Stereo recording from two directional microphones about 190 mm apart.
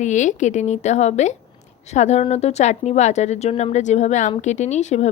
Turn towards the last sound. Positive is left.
turn(degrees=35)  # may be behind; listen again after turning